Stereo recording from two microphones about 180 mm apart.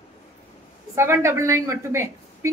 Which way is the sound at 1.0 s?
15° right (ahead or behind).